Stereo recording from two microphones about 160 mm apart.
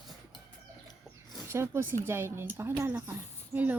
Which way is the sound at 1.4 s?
15° right (ahead or behind).